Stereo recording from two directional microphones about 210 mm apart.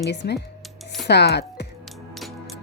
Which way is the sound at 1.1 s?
50° left (ahead or behind).